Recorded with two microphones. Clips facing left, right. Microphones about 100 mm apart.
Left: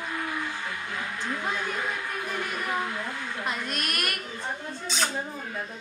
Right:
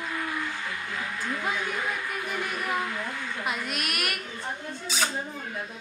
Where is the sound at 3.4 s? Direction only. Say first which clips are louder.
Even; 5° right (ahead or behind).